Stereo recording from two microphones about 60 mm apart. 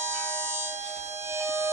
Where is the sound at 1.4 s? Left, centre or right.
Right.